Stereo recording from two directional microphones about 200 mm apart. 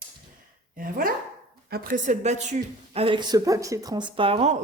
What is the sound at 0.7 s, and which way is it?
Speech, 45° right (ahead or behind).